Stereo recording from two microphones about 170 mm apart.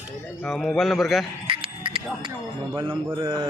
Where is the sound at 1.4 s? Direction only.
30° right (ahead or behind).